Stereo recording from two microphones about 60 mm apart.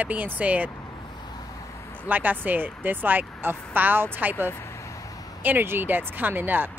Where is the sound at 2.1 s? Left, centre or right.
Right.